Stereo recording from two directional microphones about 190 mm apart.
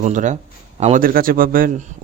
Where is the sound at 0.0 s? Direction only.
40° right (ahead or behind).